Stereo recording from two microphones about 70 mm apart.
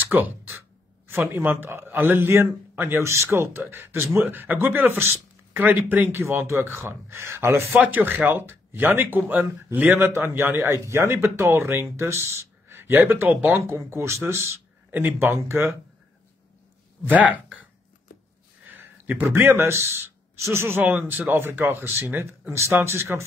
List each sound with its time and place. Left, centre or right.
0.0 s a sound: right
1.0 s a man's voice: right
3.0 s a man's voice: right
4.4 s a man's voice: right
13.6 s a man's voice: right
17.0 s speech: right
18.7 s a sound: right
19.2 s a man's voice: right